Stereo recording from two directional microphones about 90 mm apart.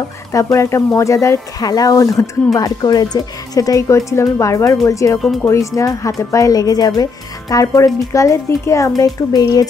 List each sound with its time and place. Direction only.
0.3 s speech: 35° left (ahead or behind)